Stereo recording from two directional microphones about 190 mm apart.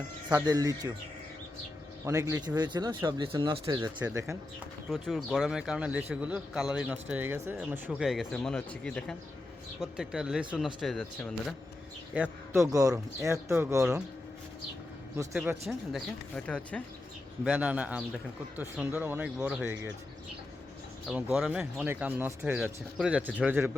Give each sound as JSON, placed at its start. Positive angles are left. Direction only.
{"t": 0.3, "sound": "speech", "side_deg": -20}
{"t": 2.0, "sound": "speech", "side_deg": -15}
{"t": 4.9, "sound": "a man's voice", "side_deg": 0}
{"t": 7.9, "sound": "a man's voice", "side_deg": 0}
{"t": 12.1, "sound": "a man's voice", "side_deg": -5}
{"t": 12.7, "sound": "speech", "side_deg": -20}
{"t": 15.6, "sound": "a man's voice", "side_deg": 0}
{"t": 17.4, "sound": "a man's voice", "side_deg": -5}
{"t": 21.1, "sound": "speech", "side_deg": -5}